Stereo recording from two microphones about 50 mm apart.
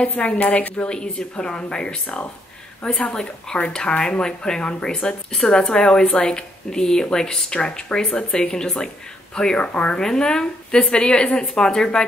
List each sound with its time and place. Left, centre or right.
0.4 s a woman's voice: left
0.8 s speech: centre